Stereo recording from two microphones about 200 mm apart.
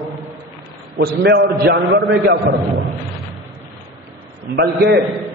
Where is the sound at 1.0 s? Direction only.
55° right (ahead or behind).